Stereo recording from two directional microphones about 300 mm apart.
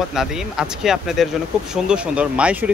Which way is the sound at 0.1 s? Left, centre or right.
Centre.